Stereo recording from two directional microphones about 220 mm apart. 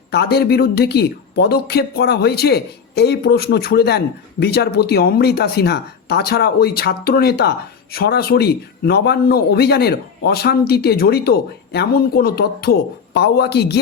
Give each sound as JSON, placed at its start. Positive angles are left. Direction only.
{"t": 0.1, "sound": "speech", "side_deg": 50}